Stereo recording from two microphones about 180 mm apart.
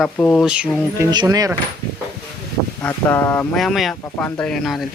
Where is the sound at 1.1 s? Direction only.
20° right (ahead or behind).